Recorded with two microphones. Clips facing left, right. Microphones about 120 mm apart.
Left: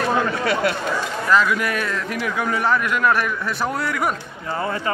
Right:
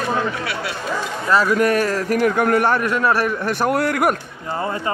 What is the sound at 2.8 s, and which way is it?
Speech, 35° right (ahead or behind).